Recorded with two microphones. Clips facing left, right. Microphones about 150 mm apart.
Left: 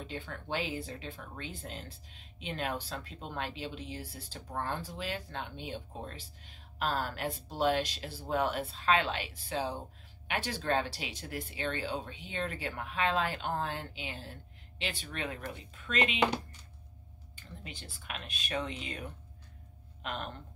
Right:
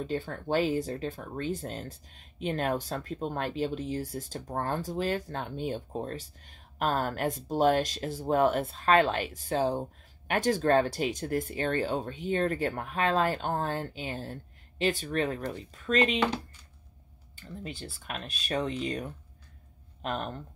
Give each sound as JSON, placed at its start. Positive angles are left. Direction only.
{"t": 0.0, "sound": "speech", "side_deg": -40}
{"t": 17.4, "sound": "speech", "side_deg": -40}